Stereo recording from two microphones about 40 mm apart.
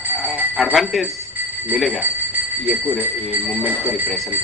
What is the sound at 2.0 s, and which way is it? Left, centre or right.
Speech, right.